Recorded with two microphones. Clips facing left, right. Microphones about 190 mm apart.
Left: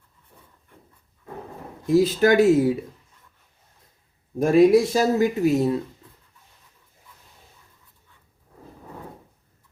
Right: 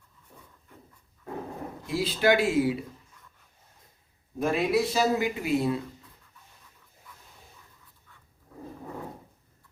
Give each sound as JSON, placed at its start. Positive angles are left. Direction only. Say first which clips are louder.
{"t": 1.9, "sound": "speech", "louder": "left 7 dB", "side_deg": 45}
{"t": 4.4, "sound": "speech", "louder": "left 10 dB", "side_deg": 45}